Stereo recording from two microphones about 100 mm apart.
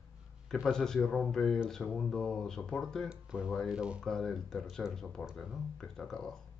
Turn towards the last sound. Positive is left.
turn(degrees=5)  # may be behind; listen again after turning